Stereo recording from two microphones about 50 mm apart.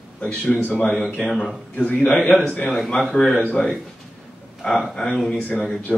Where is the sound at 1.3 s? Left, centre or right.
Centre.